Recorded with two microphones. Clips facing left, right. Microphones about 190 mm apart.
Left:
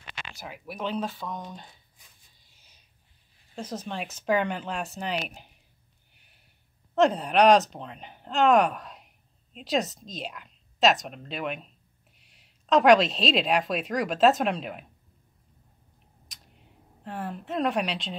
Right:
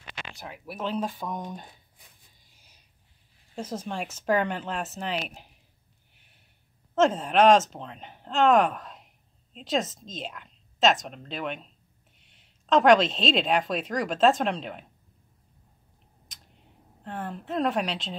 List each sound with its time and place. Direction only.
0.4 s speech: centre (ahead or behind)
1.0 s speech: 15° right (ahead or behind)
3.5 s speech: 10° right (ahead or behind)
6.1 s snort: centre (ahead or behind)
7.0 s a woman's voice: centre (ahead or behind)
16.3 s a sound: centre (ahead or behind)